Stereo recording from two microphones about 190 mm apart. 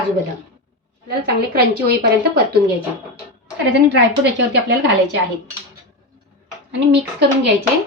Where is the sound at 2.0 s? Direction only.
55° right (ahead or behind).